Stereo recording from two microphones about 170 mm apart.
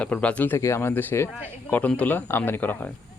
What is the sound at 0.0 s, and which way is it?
Speech, 5° left (ahead or behind).